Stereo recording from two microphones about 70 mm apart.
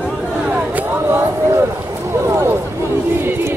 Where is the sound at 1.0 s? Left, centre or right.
Right.